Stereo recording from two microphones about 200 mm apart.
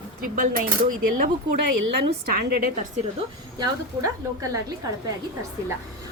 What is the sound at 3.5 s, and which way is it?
A woman's voice, 15° right (ahead or behind).